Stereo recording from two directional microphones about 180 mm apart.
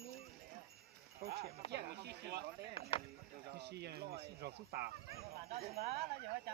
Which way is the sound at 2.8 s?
30° left (ahead or behind).